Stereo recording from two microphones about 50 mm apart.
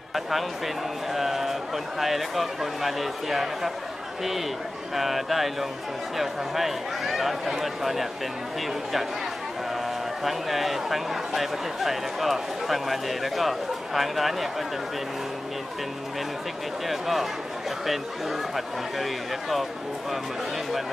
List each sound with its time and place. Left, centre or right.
0.1 s a sound: centre
1.1 s speech: centre
4.9 s speech: centre
10.2 s speech: centre
16.8 s speech: centre